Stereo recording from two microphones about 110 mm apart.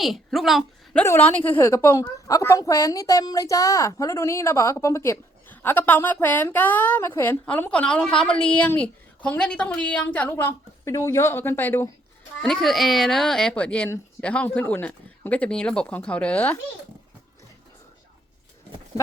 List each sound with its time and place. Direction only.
0.0 s a child's voice: centre (ahead or behind)
1.2 s a woman's voice: 15° left (ahead or behind)
12.4 s a child's voice: 5° left (ahead or behind)